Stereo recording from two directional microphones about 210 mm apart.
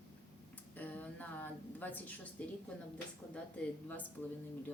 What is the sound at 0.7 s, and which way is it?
A woman's voice, 10° left (ahead or behind).